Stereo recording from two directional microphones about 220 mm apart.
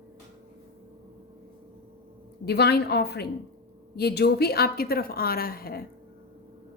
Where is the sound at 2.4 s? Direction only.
50° left (ahead or behind).